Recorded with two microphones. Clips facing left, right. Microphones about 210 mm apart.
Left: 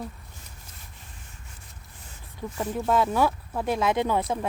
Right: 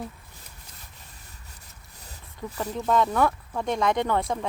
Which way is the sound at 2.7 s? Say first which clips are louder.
Even; 5° left (ahead or behind).